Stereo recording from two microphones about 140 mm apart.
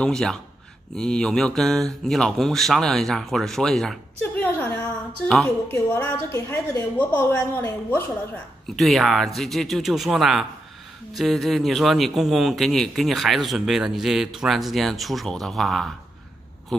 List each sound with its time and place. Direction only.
0.0 s speech: 5° left (ahead or behind)
4.2 s a sound: 10° left (ahead or behind)
5.7 s a woman's voice: 15° left (ahead or behind)
8.6 s speech: centre (ahead or behind)